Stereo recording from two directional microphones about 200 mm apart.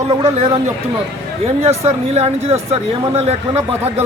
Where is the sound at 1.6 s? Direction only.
30° right (ahead or behind).